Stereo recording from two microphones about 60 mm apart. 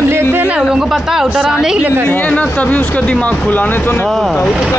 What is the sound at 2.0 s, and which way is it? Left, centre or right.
Speech, left.